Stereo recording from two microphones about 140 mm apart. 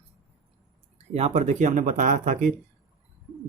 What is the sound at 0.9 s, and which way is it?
Speech, 50° right (ahead or behind).